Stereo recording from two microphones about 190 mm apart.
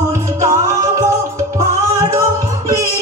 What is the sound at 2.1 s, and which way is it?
Music, 15° right (ahead or behind).